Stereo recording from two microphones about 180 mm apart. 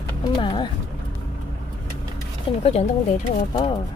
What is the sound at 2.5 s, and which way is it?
Speech, 30° left (ahead or behind).